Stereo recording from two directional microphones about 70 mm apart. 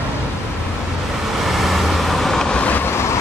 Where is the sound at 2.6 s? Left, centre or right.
Left.